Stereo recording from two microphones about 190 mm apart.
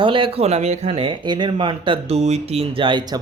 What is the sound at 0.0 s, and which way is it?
Speech, 25° right (ahead or behind).